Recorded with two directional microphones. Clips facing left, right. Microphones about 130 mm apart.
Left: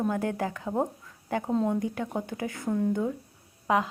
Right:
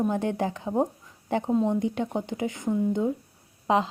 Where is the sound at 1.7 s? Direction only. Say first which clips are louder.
Right 3 dB; 25° right (ahead or behind).